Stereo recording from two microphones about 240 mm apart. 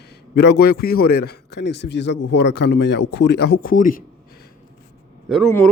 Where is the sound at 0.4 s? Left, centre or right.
Left.